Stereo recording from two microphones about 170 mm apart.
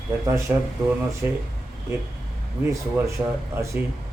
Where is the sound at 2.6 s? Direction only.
15° right (ahead or behind).